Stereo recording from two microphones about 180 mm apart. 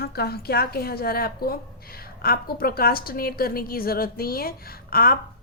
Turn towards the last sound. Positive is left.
turn(degrees=55)  # may be behind; listen again after turning